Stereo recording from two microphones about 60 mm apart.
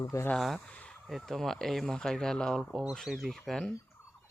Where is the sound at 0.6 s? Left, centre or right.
Left.